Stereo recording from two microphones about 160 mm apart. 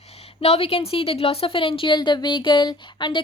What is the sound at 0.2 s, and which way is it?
A woman's voice, 40° left (ahead or behind).